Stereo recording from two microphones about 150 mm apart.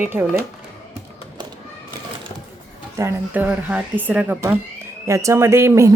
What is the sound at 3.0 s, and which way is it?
Speech, 15° right (ahead or behind).